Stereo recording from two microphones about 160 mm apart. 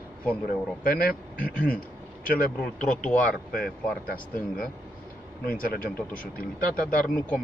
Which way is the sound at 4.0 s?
65° left (ahead or behind).